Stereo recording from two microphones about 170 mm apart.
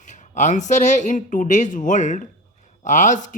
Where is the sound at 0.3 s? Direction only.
45° left (ahead or behind).